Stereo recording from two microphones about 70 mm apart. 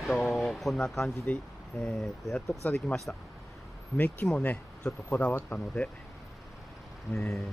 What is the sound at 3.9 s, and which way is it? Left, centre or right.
Speech, left.